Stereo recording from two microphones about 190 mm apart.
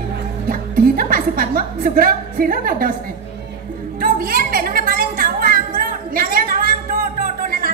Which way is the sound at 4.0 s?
50° right (ahead or behind).